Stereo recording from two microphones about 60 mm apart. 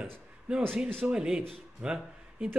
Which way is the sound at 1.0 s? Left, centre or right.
Centre.